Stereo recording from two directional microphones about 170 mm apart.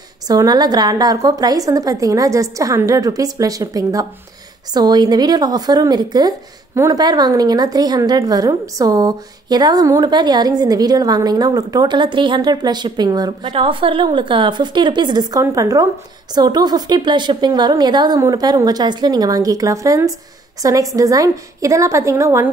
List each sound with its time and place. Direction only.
0.3 s a woman's voice: 25° right (ahead or behind)